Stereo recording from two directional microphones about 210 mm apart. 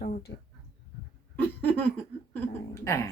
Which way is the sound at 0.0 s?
45° left (ahead or behind).